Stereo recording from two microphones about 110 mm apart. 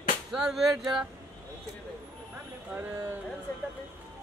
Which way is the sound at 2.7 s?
15° right (ahead or behind).